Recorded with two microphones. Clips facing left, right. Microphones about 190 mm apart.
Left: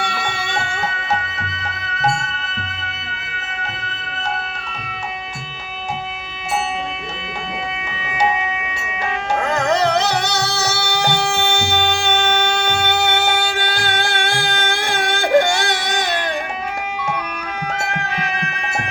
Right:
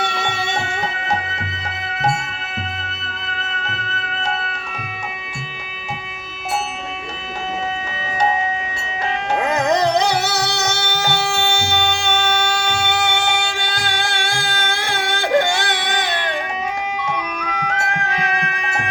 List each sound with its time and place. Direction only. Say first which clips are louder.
0.0 s music: right 2 dB; 20° right (ahead or behind)
9.4 s music: right 1 dB; 20° right (ahead or behind); by 11.8 s 15° left (ahead or behind)
12.8 s music: left 2 dB; 20° left (ahead or behind)
15.1 s music: left 2 dB; 10° left (ahead or behind)
15.8 s baby cry: even; 45° left (ahead or behind)